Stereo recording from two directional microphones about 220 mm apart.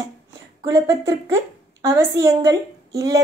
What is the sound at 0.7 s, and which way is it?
A woman's voice, 15° right (ahead or behind).